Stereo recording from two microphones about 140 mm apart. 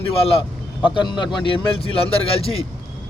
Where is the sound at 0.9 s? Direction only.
35° left (ahead or behind).